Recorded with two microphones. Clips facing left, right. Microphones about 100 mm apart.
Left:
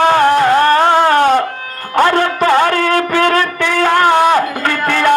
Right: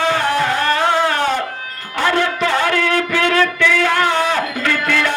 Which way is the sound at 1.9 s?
45° left (ahead or behind).